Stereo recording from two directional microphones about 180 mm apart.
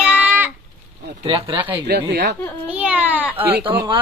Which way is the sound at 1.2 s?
30° right (ahead or behind).